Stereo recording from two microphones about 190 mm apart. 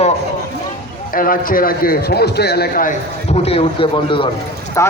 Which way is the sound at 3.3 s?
30° left (ahead or behind).